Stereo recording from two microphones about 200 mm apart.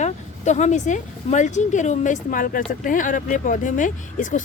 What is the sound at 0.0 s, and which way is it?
Speech, 35° left (ahead or behind).